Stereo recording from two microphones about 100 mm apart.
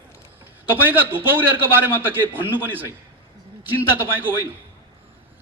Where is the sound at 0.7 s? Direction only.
20° right (ahead or behind).